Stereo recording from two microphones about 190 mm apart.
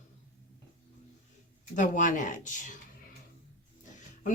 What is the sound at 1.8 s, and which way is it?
Speech, 40° left (ahead or behind).